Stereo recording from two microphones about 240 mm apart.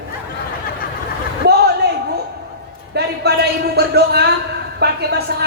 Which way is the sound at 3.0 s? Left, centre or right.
Right.